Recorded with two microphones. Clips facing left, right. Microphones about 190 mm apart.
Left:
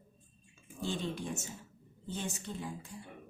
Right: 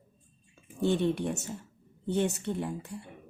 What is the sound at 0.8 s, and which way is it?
Speech, 65° right (ahead or behind).